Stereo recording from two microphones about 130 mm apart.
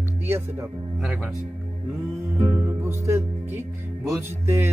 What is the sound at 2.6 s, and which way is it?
Music, 20° right (ahead or behind).